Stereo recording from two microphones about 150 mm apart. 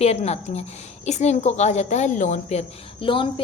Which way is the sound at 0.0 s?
45° left (ahead or behind).